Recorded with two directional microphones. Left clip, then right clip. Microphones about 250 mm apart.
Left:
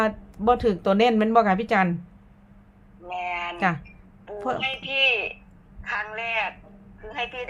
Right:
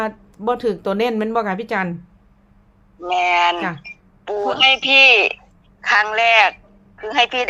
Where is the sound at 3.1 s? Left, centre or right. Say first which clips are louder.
Right 14 dB; right.